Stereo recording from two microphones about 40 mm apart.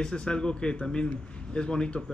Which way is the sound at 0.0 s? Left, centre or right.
Left.